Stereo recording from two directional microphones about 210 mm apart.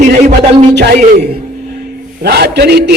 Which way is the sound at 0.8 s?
50° right (ahead or behind).